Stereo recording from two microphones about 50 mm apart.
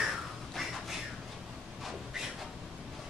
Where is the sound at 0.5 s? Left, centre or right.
Centre.